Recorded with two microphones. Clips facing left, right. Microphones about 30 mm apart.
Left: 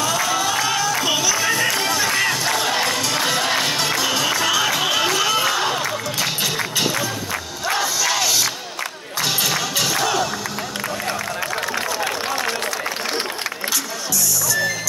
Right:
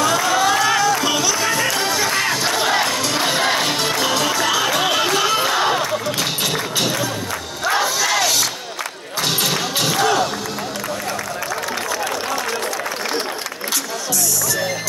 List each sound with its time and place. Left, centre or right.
0.0 s a sound: centre
0.9 s music: centre
1.9 s music: centre
2.5 s battle cry: centre
2.9 s music: centre
3.2 s music: centre
5.1 s a sound: centre
7.7 s crowd: centre
9.4 s basketball bounce: centre